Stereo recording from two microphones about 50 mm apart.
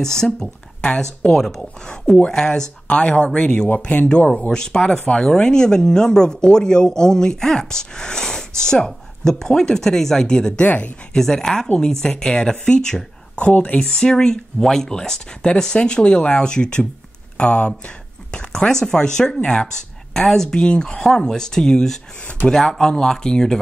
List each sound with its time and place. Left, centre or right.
0.0 s speech: centre
1.3 s speech: centre
2.1 s speech: centre
4.5 s speech: centre
10.6 s speech: left
11.1 s speech: centre
13.4 s speech: left
13.7 s speech: centre